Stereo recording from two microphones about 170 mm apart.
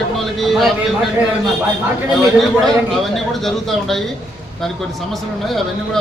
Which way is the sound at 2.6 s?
Centre (ahead or behind).